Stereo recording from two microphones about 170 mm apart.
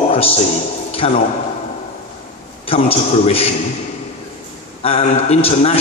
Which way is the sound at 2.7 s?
35° left (ahead or behind).